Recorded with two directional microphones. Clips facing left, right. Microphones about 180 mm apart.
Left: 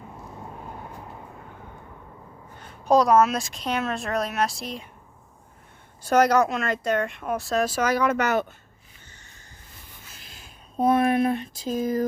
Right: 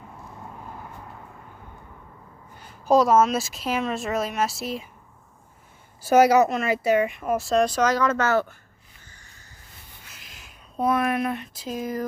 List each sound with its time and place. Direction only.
2.6 s speech: 5° right (ahead or behind)
6.0 s speech: 5° right (ahead or behind); by 8.5 s 20° left (ahead or behind)
10.1 s a sound: 30° left (ahead or behind)